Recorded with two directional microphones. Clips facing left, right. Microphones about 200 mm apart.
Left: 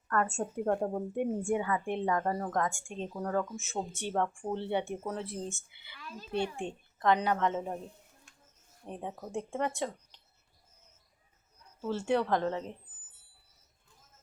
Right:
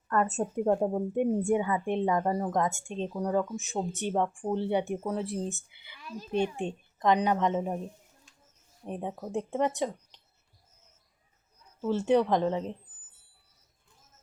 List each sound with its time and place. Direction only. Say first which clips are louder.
0.1 s a woman's voice: right 3 dB; 20° right (ahead or behind)
8.8 s a woman's voice: right 5 dB; 15° right (ahead or behind)
11.8 s a woman's voice: right 5 dB; 15° right (ahead or behind)